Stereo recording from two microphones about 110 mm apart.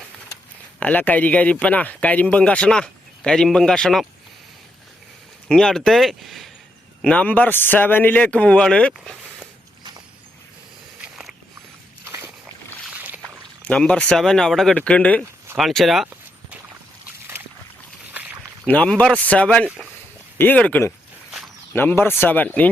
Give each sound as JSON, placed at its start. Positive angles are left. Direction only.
{"t": 0.8, "sound": "speech", "side_deg": 15}
{"t": 5.5, "sound": "speech", "side_deg": 5}
{"t": 7.0, "sound": "speech", "side_deg": 10}
{"t": 11.0, "sound": "a sound", "side_deg": -10}
{"t": 12.0, "sound": "slosh", "side_deg": -25}
{"t": 12.9, "sound": "boat", "side_deg": -15}
{"t": 13.7, "sound": "speech", "side_deg": 10}
{"t": 15.5, "sound": "speech", "side_deg": 0}
{"t": 18.1, "sound": "a sound", "side_deg": -15}
{"t": 18.6, "sound": "speech", "side_deg": 10}
{"t": 19.6, "sound": "speech", "side_deg": -10}
{"t": 20.4, "sound": "speech", "side_deg": 15}
{"t": 21.2, "sound": "a sound", "side_deg": 0}
{"t": 21.7, "sound": "speech", "side_deg": 20}